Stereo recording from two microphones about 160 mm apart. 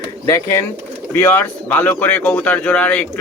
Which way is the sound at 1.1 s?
15° left (ahead or behind).